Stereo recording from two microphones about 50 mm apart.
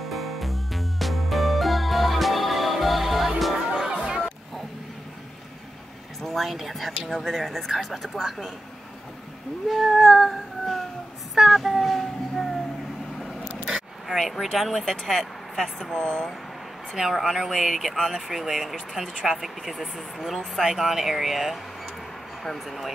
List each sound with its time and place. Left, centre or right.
0.1 s music: centre
6.2 s speech: centre
9.7 s child singing: centre
11.3 s a sound: centre
13.7 s speech: centre
16.0 s speech: centre
16.9 s speech: centre